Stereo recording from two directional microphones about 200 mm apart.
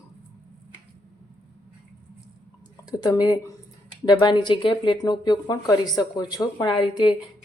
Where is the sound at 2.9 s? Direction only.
20° left (ahead or behind).